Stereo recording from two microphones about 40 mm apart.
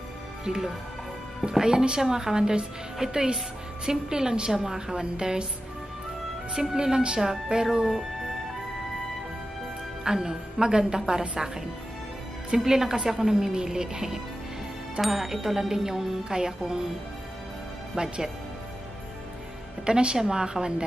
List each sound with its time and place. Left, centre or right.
1.5 s a woman's voice: centre
6.6 s a woman's voice: centre
10.0 s a woman's voice: centre
12.5 s a woman's voice: centre
17.9 s a woman's voice: centre
19.9 s a woman's voice: right